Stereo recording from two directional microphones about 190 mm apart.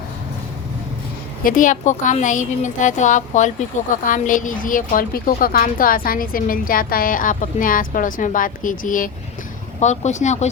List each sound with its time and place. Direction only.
1.5 s a woman's voice: 45° left (ahead or behind)